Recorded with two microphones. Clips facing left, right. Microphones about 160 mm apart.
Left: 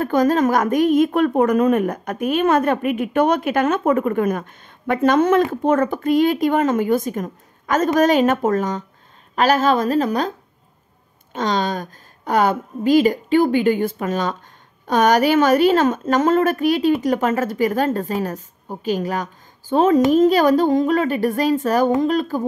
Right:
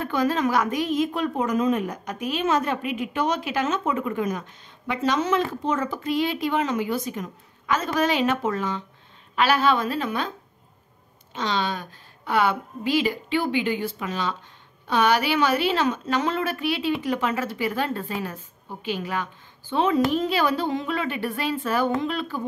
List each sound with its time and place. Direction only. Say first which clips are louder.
0.0 s a woman's voice: left 7 dB; 45° left (ahead or behind)
11.3 s a woman's voice: left 5 dB; 45° left (ahead or behind)